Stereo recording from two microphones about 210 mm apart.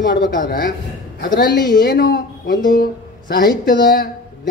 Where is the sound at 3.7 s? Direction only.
45° left (ahead or behind).